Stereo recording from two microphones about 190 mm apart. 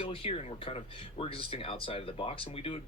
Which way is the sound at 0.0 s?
30° left (ahead or behind).